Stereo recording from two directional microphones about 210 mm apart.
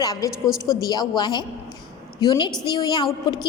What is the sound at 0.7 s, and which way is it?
A woman's voice, 20° left (ahead or behind).